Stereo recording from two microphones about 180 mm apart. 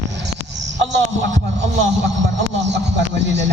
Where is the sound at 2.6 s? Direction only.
75° right (ahead or behind).